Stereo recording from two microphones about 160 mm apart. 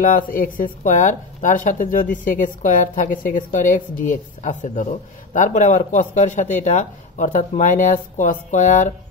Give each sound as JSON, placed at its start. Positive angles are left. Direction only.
{"t": 0.0, "sound": "speech", "side_deg": 60}